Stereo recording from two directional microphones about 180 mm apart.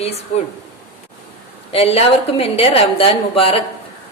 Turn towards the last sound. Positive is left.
turn(degrees=30)  # may be behind; listen again after turning